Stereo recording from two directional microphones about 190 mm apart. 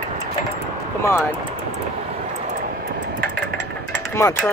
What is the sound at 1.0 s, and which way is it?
Speech, 15° left (ahead or behind).